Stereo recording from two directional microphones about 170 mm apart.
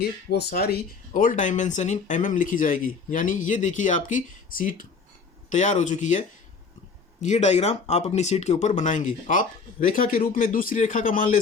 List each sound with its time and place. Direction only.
0.0 s speech: 75° left (ahead or behind); by 11.3 s 50° left (ahead or behind)